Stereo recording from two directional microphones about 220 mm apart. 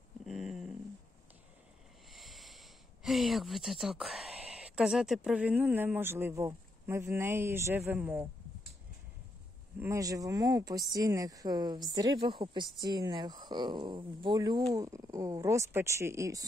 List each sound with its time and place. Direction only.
0.3 s a sound: centre (ahead or behind)
2.1 s speech: centre (ahead or behind)
9.8 s speech: 15° right (ahead or behind)